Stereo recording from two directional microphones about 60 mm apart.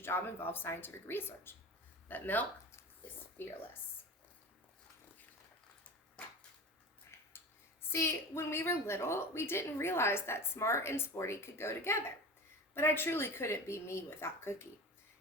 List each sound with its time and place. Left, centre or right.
0.0 s speech: left
2.0 s speech: left
3.4 s speech: left
7.1 s a sound: left
7.9 s a woman's voice: left